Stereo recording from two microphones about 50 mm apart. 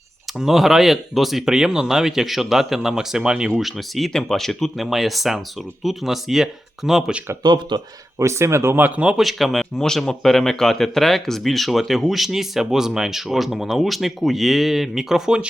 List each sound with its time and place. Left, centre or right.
0.3 s speech: centre
3.6 s speech: centre
8.2 s speech: right
8.9 s speech: right
9.1 s speech: centre